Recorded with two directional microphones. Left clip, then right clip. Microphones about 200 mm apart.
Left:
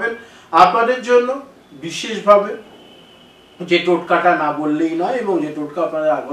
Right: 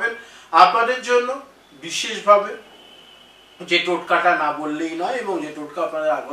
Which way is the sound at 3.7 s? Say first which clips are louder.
Left 3 dB; 10° left (ahead or behind).